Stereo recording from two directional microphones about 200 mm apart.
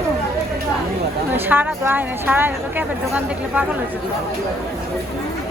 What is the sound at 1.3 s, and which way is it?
Speech, 10° right (ahead or behind).